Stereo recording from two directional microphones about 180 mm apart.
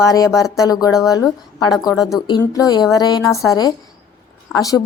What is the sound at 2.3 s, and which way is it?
Speech, 20° left (ahead or behind).